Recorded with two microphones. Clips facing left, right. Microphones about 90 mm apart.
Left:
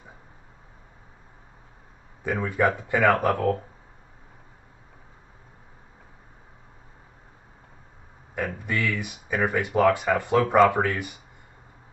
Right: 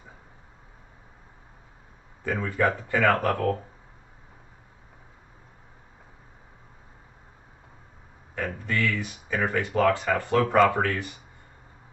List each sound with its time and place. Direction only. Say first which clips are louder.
2.2 s speech: left 2 dB; 15° left (ahead or behind)
8.4 s speech: even; 15° left (ahead or behind)